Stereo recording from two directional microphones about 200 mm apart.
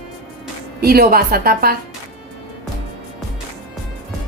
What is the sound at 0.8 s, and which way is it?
A woman's voice, 50° right (ahead or behind).